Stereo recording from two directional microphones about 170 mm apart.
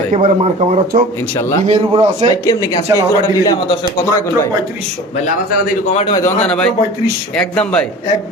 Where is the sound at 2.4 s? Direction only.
20° left (ahead or behind).